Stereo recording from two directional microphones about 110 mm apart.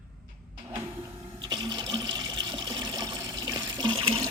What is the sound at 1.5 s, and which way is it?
Water, 40° right (ahead or behind).